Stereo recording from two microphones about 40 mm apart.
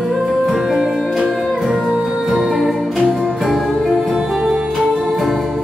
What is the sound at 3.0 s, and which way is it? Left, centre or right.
Music, right.